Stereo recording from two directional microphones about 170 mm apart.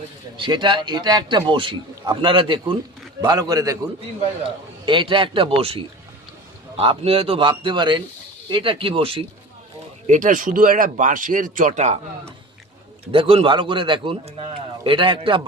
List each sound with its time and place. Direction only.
0.3 s a man's voice: 30° right (ahead or behind)
4.9 s a man's voice: 30° right (ahead or behind)
10.1 s speech: 50° right (ahead or behind)
13.1 s speech: 30° right (ahead or behind)